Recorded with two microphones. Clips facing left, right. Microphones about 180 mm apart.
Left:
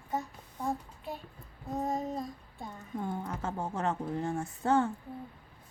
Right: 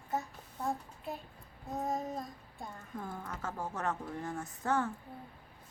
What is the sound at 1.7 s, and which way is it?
Child singing, centre (ahead or behind).